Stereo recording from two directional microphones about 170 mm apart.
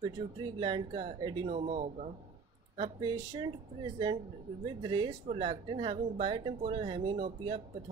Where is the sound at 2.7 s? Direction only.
25° right (ahead or behind).